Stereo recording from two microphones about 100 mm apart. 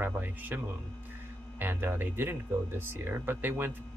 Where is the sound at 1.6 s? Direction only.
20° right (ahead or behind).